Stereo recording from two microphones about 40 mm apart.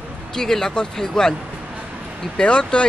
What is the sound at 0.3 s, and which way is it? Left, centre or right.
Speech, centre.